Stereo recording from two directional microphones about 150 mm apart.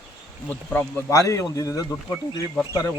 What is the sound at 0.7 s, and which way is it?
Speech, 15° left (ahead or behind).